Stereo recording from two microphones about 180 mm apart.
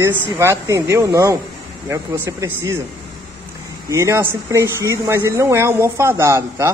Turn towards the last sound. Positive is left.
turn(degrees=-15)  # may be behind; listen again after turning